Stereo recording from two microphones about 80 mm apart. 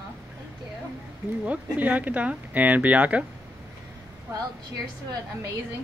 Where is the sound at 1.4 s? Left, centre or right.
Centre.